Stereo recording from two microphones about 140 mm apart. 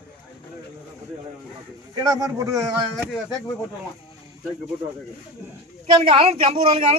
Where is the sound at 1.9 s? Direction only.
25° right (ahead or behind).